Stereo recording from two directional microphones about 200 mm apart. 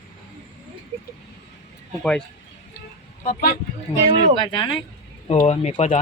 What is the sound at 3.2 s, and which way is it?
Speech, 45° left (ahead or behind).